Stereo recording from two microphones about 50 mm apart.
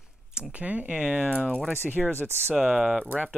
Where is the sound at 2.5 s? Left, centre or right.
Centre.